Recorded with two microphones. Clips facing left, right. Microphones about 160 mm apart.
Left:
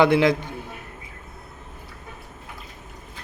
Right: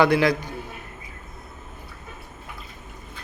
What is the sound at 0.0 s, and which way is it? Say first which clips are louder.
Speech: left 1 dB; 20° left (ahead or behind).